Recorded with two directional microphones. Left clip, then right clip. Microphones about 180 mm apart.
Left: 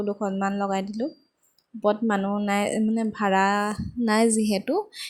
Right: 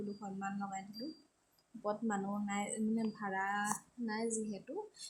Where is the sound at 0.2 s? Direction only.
40° left (ahead or behind).